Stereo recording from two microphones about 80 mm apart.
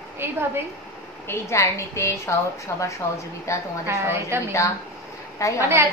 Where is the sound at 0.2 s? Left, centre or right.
Right.